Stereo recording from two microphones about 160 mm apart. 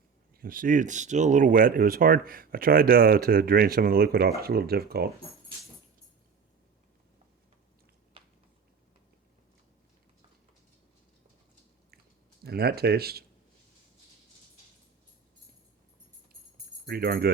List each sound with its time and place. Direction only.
0.3 s speech: 60° right (ahead or behind)
12.4 s speech: 80° right
16.8 s speech: 75° right (ahead or behind)